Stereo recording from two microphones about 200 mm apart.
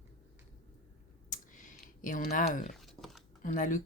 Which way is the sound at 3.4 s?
40° left (ahead or behind).